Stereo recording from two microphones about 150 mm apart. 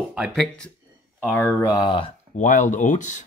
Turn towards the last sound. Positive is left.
turn(degrees=55)  # may be behind; listen again after turning